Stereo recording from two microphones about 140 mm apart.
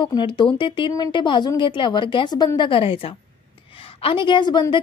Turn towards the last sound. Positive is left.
turn(degrees=35)  # may be behind; listen again after turning